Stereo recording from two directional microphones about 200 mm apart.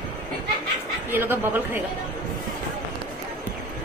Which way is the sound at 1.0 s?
10° right (ahead or behind).